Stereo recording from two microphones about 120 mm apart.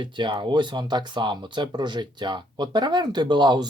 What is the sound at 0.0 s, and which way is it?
Speech, 40° right (ahead or behind).